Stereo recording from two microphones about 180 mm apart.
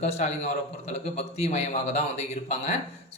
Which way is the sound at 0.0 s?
35° left (ahead or behind).